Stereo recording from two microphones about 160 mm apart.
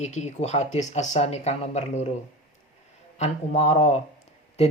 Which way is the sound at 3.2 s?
45° left (ahead or behind).